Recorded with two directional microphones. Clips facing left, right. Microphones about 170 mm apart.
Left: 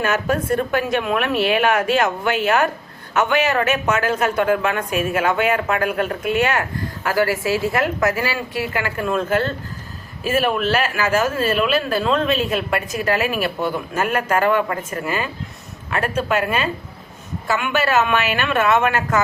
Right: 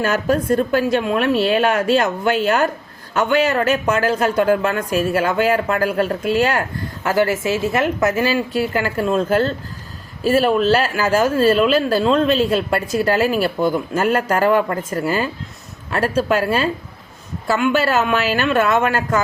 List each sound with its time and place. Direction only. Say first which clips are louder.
0.0 s speech: right 2 dB; 35° right (ahead or behind)
17.7 s speech: right 1 dB; 35° right (ahead or behind)